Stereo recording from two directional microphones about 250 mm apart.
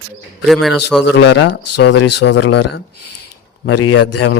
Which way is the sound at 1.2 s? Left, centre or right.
Left.